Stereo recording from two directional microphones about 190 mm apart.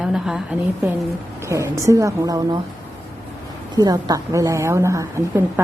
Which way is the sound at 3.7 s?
20° right (ahead or behind).